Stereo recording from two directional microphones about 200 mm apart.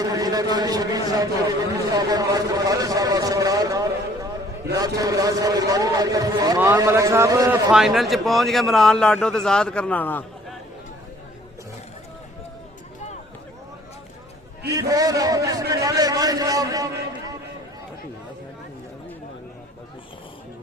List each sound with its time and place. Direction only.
0.0 s a man's voice: 20° right (ahead or behind)
7.7 s a man's voice: centre (ahead or behind)
14.7 s a man's voice: 15° right (ahead or behind)